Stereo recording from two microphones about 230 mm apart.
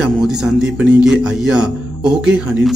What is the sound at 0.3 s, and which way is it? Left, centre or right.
A man's voice, centre.